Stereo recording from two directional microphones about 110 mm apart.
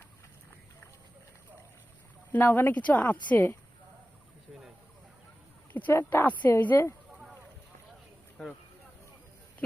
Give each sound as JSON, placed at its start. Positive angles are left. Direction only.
{"t": 2.3, "sound": "speech", "side_deg": 20}
{"t": 5.7, "sound": "speech", "side_deg": 20}
{"t": 7.1, "sound": "a sound", "side_deg": -10}
{"t": 8.4, "sound": "speech", "side_deg": 5}